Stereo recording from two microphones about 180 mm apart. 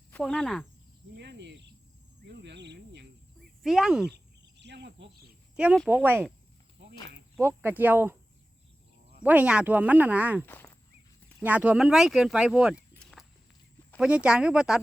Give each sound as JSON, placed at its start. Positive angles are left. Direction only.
{"t": 0.1, "sound": "speech", "side_deg": 5}
{"t": 1.1, "sound": "speech", "side_deg": -70}
{"t": 2.2, "sound": "insect", "side_deg": -70}
{"t": 3.6, "sound": "speech", "side_deg": 0}
{"t": 4.1, "sound": "a sound", "side_deg": -70}
{"t": 5.5, "sound": "speech", "side_deg": 0}
{"t": 7.3, "sound": "speech", "side_deg": -10}
{"t": 9.2, "sound": "speech", "side_deg": -10}
{"t": 10.4, "sound": "walk", "side_deg": 10}
{"t": 11.4, "sound": "speech", "side_deg": -10}
{"t": 12.7, "sound": "walk", "side_deg": 10}
{"t": 14.0, "sound": "speech", "side_deg": -5}